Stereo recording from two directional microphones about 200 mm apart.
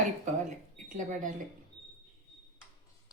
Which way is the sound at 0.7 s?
40° right (ahead or behind).